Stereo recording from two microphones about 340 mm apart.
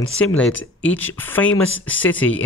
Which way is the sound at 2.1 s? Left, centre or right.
Left.